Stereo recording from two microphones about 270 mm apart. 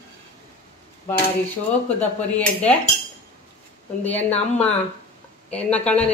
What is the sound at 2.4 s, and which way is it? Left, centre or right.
Speech, centre.